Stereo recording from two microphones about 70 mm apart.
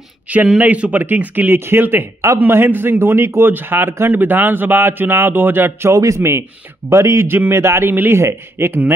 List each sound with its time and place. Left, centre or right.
0.6 s a man's voice: right
5.9 s a man's voice: right
7.9 s a man's voice: right